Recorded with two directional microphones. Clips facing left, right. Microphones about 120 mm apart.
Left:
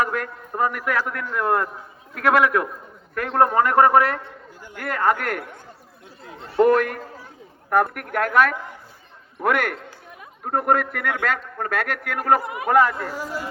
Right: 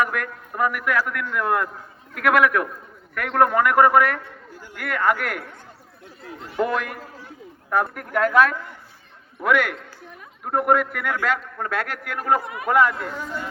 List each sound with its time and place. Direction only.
0.0 s a man's voice: 30° left (ahead or behind)
6.6 s a man's voice: 50° left (ahead or behind)
13.1 s speech: 5° left (ahead or behind)